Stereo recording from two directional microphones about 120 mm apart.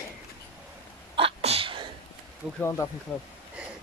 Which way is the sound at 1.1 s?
55° right (ahead or behind).